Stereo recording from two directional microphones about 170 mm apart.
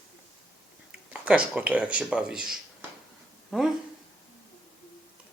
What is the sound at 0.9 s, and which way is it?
Speech, 5° right (ahead or behind).